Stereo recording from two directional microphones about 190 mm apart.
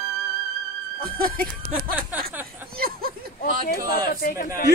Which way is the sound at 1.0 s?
50° right (ahead or behind).